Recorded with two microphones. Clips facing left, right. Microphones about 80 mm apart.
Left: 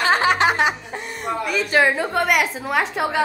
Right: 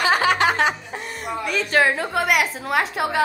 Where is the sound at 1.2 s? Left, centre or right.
Centre.